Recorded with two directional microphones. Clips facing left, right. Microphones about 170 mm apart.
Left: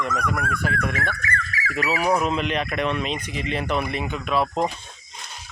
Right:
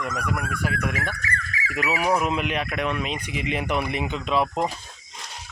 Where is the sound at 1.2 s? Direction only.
25° right (ahead or behind).